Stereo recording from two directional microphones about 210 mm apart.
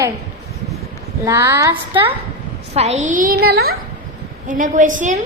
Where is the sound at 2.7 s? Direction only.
30° right (ahead or behind).